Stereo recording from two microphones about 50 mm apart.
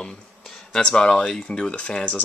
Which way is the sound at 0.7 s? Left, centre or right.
Centre.